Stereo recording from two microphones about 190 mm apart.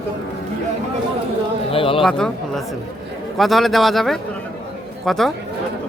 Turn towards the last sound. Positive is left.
turn(degrees=0)  # may be behind; listen again after turning